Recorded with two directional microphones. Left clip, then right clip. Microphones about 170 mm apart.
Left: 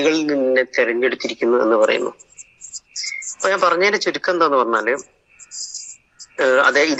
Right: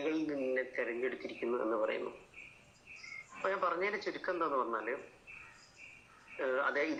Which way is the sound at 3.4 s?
70° left (ahead or behind).